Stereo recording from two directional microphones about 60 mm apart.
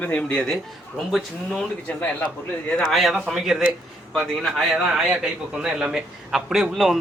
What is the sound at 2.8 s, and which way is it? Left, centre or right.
A man's voice, centre.